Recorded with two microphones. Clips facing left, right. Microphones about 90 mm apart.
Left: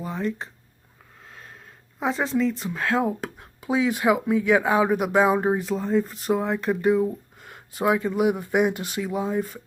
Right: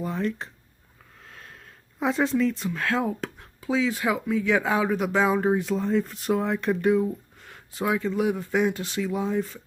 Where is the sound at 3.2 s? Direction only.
15° left (ahead or behind).